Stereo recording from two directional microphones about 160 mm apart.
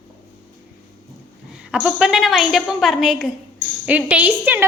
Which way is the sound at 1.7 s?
5° right (ahead or behind).